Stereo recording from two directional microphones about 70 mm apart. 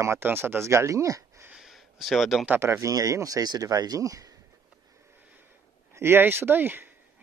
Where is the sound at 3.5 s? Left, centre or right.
Right.